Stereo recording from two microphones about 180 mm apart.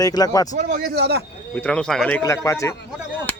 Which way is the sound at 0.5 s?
60° right (ahead or behind).